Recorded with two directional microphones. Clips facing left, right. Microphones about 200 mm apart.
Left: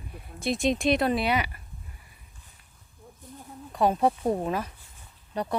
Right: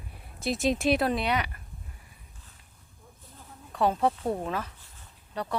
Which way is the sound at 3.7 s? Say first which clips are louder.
Left 2 dB; 15° left (ahead or behind).